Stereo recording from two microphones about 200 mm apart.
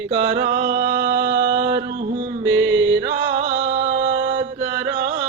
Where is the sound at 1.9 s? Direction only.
40° right (ahead or behind).